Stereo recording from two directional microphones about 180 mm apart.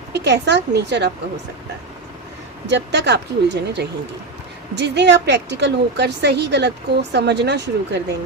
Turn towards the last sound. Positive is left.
turn(degrees=-70)  # may be behind; listen again after turning